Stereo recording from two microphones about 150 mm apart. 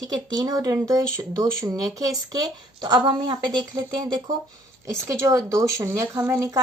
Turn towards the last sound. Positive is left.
turn(degrees=-20)  # may be behind; listen again after turning